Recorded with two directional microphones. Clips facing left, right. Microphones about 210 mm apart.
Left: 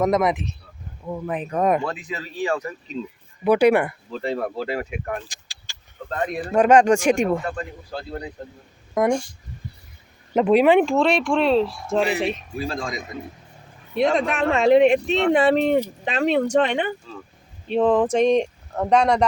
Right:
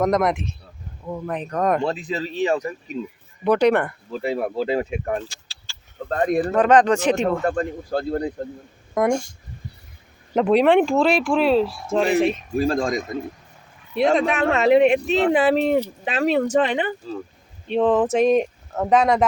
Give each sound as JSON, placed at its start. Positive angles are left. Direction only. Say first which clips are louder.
{"t": 0.0, "sound": "speech", "louder": "even", "side_deg": 0}
{"t": 1.8, "sound": "speech", "louder": "right 5 dB", "side_deg": -30}
{"t": 3.4, "sound": "speech", "louder": "left 1 dB", "side_deg": 10}
{"t": 4.1, "sound": "speech", "louder": "right 3 dB", "side_deg": -10}
{"t": 5.3, "sound": "vehicle", "louder": "even", "side_deg": 15}
{"t": 6.1, "sound": "speech", "louder": "right 6 dB", "side_deg": -40}
{"t": 6.5, "sound": "speech", "louder": "left 3 dB", "side_deg": 10}
{"t": 7.4, "sound": "speech", "louder": "right 7 dB", "side_deg": -50}
{"t": 9.0, "sound": "speech", "louder": "even", "side_deg": 0}
{"t": 10.3, "sound": "speech", "louder": "even", "side_deg": 5}
{"t": 12.5, "sound": "speech", "louder": "right 7 dB", "side_deg": -45}
{"t": 13.9, "sound": "speech", "louder": "right 2 dB", "side_deg": 0}